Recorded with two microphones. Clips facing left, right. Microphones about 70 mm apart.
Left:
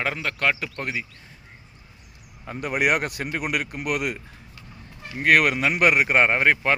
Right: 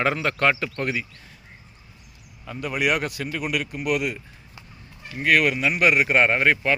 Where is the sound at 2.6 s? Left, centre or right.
Left.